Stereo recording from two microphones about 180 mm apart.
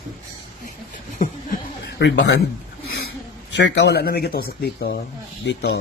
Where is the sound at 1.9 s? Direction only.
75° left (ahead or behind).